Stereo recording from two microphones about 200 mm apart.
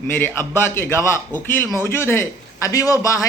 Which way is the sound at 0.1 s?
10° left (ahead or behind).